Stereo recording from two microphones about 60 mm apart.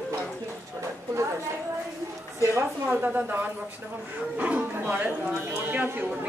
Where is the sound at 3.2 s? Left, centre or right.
Right.